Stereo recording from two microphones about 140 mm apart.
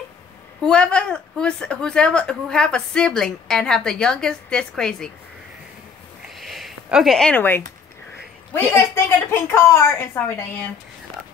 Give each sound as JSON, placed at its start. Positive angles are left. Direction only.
{"t": 0.7, "sound": "a woman's voice", "side_deg": 5}
{"t": 6.3, "sound": "a sound", "side_deg": 0}
{"t": 8.5, "sound": "a woman's voice", "side_deg": 15}